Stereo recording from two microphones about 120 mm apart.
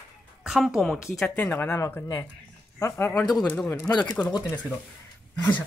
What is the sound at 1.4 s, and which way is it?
Speech, 15° left (ahead or behind).